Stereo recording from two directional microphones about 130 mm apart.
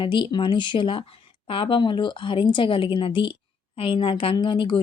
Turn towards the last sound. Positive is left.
turn(degrees=40)  # may be behind; listen again after turning